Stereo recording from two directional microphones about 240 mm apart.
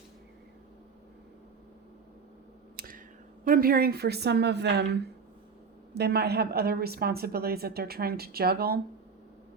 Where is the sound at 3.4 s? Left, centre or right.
Right.